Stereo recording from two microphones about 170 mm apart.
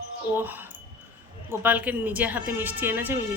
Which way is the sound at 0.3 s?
10° right (ahead or behind).